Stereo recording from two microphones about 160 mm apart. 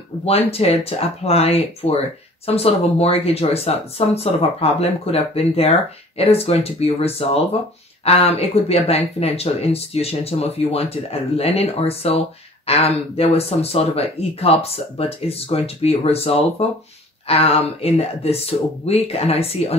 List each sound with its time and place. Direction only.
0.5 s speech: 40° left (ahead or behind)